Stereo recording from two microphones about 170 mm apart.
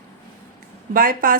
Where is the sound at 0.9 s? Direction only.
55° right (ahead or behind).